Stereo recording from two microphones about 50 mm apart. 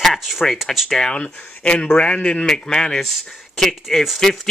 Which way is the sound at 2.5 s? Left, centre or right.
Centre.